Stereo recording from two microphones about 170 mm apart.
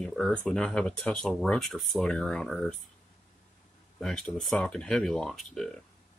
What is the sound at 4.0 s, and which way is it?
Speech, 5° left (ahead or behind).